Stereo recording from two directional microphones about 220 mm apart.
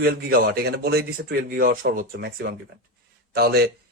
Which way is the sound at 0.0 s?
45° right (ahead or behind).